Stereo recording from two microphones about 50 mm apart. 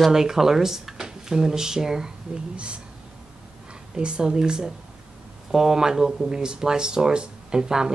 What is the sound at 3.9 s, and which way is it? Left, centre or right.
Speech, centre.